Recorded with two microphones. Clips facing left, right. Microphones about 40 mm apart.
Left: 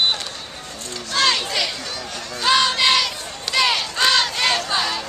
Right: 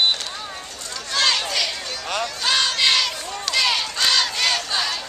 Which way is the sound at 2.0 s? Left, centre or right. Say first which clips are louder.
Right 7 dB; right.